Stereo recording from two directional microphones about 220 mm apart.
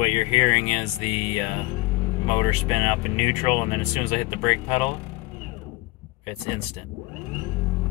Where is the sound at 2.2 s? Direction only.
25° left (ahead or behind).